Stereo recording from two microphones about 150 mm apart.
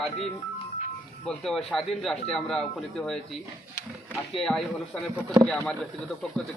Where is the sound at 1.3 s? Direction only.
5° left (ahead or behind).